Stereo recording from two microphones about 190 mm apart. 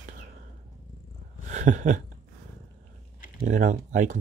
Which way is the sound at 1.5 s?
40° right (ahead or behind).